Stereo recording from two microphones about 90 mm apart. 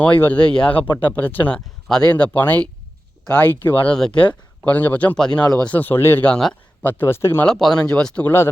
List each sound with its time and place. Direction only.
0.0 s speech: 20° left (ahead or behind)
1.5 s speech: 10° left (ahead or behind)
3.9 s speech: 10° left (ahead or behind)
5.6 s speech: 20° left (ahead or behind)
6.3 s speech: 10° left (ahead or behind)
6.8 s speech: 20° left (ahead or behind)
7.4 s speech: 5° left (ahead or behind)
8.2 s speech: 25° left (ahead or behind)